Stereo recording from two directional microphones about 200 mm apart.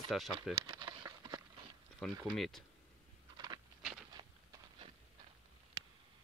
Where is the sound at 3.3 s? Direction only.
20° right (ahead or behind).